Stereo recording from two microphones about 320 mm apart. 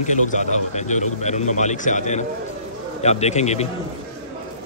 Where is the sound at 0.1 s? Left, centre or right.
Left.